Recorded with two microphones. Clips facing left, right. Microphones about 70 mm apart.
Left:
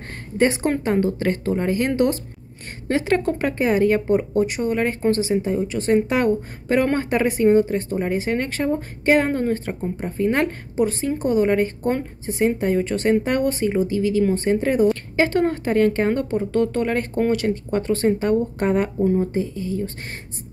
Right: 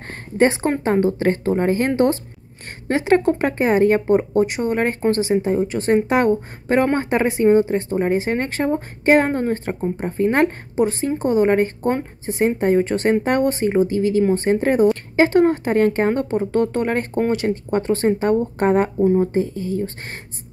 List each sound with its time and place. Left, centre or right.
0.4 s a woman's voice: right
15.1 s a woman's voice: right